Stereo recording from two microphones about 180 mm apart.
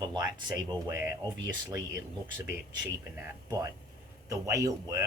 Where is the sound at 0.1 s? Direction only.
25° right (ahead or behind).